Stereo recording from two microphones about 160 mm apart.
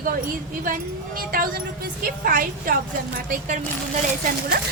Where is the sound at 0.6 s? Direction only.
60° right (ahead or behind).